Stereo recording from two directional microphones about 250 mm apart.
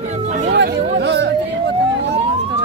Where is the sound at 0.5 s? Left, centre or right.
Right.